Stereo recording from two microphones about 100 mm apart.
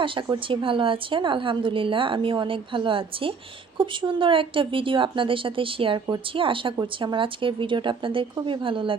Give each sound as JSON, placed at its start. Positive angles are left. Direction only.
{"t": 0.0, "sound": "a woman's voice", "side_deg": -55}